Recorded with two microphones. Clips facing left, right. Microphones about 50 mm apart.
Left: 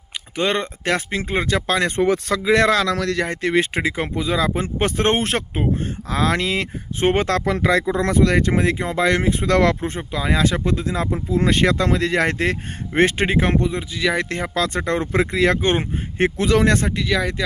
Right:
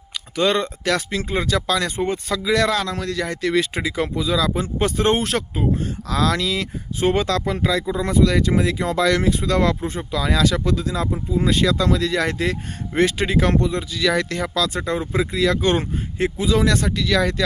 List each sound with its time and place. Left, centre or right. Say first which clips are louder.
0.3 s speech: right 2 dB; left
2.0 s speech: left 5 dB; left
2.3 s speech: left 1 dB; left
2.7 s a man's voice: left 4 dB; left
3.2 s speech: left 1 dB; left
7.4 s speech: left 3 dB; left
8.8 s speech: even; left
9.5 s speech: left 2 dB; left
10.0 s speech: right 1 dB; left
11.3 s speech: left 2 dB; left
15.4 s speech: left 1 dB; left
16.4 s a man's voice: left 1 dB; left
16.6 s speech: left 1 dB; left
17.1 s speech: right 3 dB; centre